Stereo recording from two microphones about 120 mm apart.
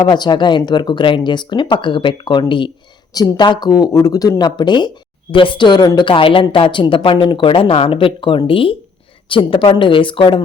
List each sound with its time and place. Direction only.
0.0 s a woman's voice: 40° left (ahead or behind)